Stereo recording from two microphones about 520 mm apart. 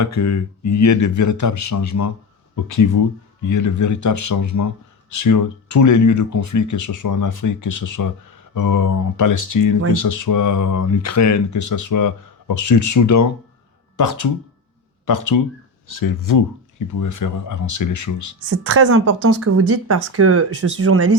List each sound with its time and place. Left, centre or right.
0.0 s speech: left
18.6 s speech: right